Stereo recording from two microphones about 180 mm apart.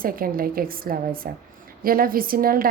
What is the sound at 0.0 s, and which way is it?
A woman's voice, 55° right (ahead or behind).